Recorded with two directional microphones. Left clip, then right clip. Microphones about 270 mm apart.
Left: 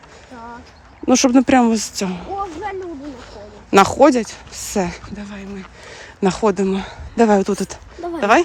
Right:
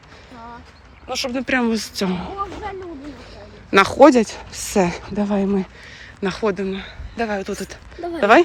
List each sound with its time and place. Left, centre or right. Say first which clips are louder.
1.0 s speech: left 10 dB; left; by 2.3 s centre
3.7 s speech: even; centre
5.8 s speech: left 6 dB; centre